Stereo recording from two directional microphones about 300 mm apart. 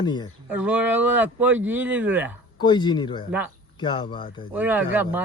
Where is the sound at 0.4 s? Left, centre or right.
Centre.